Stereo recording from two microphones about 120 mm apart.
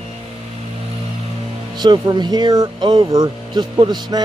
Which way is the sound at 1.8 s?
40° right (ahead or behind).